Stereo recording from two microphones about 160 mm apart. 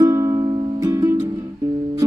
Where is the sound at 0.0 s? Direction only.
20° right (ahead or behind).